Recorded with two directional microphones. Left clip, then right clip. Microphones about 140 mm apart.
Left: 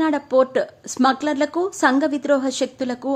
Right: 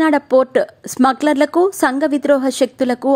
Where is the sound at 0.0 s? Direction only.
35° right (ahead or behind).